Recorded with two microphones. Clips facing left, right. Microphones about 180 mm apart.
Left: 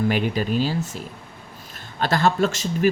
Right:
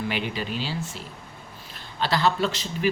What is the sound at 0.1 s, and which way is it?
Speech, 45° left (ahead or behind).